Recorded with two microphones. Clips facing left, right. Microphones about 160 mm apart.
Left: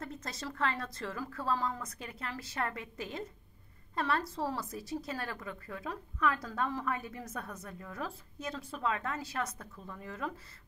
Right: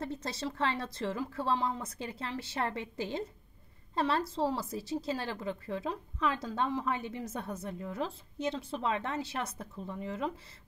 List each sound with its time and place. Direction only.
0.0 s speech: 30° right (ahead or behind)